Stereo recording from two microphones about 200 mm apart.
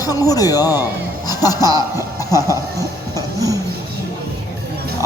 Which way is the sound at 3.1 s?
15° right (ahead or behind).